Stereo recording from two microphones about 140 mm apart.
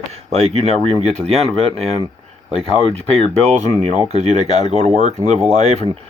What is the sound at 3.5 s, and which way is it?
Speech, 55° right (ahead or behind).